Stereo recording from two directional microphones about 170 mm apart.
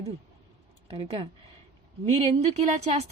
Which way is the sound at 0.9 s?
35° right (ahead or behind).